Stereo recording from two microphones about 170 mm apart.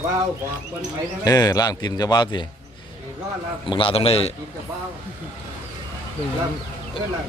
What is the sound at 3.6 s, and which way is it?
Speech, 30° left (ahead or behind).